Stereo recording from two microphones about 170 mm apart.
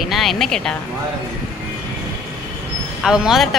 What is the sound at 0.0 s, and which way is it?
Speech, centre (ahead or behind).